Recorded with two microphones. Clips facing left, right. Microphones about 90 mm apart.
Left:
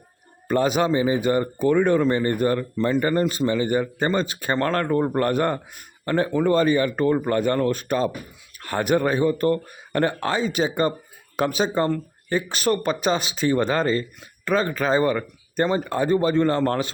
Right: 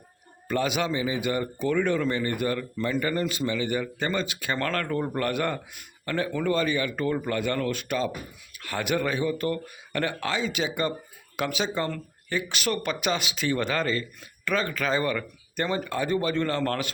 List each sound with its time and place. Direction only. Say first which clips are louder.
0.4 s a man's voice: left 6 dB; 40° left (ahead or behind)